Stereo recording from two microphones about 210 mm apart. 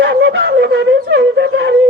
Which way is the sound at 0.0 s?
55° right (ahead or behind).